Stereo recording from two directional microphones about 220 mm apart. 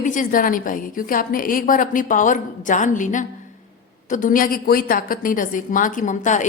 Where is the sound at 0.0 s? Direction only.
35° left (ahead or behind).